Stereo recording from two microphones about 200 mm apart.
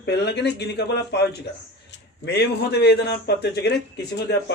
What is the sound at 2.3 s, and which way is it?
A man's voice, 55° left (ahead or behind).